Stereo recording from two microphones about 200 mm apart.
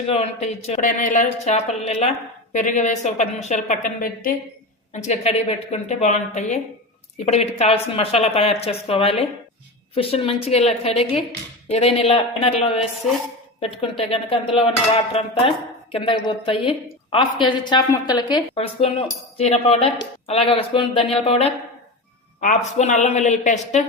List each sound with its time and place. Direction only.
0.1 s speech: 35° left (ahead or behind)
4.9 s a woman's voice: 35° left (ahead or behind)
13.6 s a woman's voice: 25° left (ahead or behind)